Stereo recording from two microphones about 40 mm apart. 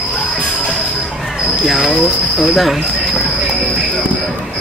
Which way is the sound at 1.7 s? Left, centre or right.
Centre.